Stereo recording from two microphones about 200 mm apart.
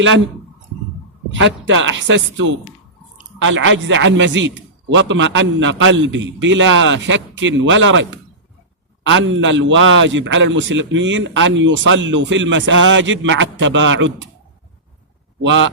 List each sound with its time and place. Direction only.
1.3 s a man's voice: 65° right (ahead or behind)
15.4 s a man's voice: 70° right (ahead or behind)